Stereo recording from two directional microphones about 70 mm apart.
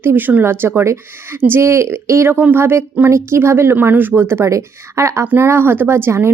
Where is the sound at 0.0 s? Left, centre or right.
Right.